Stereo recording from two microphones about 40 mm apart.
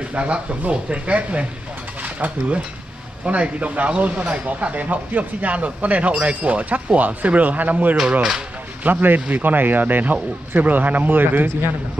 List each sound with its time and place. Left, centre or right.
0.0 s speech: right
2.0 s a sound: right
3.3 s speech: right
8.2 s speech: centre
8.8 s speech: right